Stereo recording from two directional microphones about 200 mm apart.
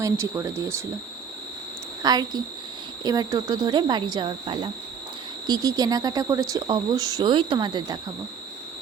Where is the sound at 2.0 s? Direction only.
20° right (ahead or behind).